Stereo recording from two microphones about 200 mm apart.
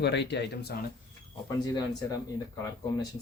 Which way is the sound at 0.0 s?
60° left (ahead or behind).